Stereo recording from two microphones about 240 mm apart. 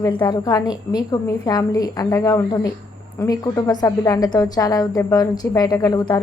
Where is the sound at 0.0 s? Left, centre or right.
Centre.